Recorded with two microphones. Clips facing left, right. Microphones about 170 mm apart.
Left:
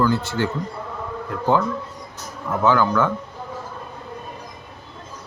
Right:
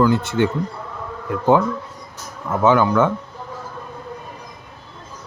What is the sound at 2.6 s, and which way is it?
Speech, 20° right (ahead or behind).